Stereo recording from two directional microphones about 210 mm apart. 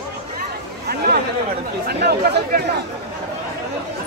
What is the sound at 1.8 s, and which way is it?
Speech, 50° right (ahead or behind).